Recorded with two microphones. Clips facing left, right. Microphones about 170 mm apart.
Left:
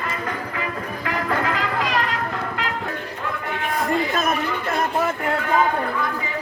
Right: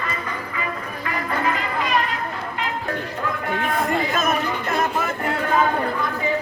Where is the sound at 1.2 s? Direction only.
90° left.